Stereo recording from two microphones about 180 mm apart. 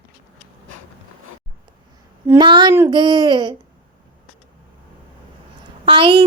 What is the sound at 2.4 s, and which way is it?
A child's voice, 25° right (ahead or behind).